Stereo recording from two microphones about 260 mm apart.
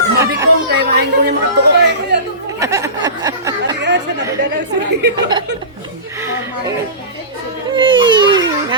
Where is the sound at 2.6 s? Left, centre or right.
Centre.